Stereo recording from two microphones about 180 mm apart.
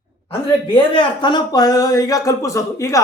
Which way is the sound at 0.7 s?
25° left (ahead or behind).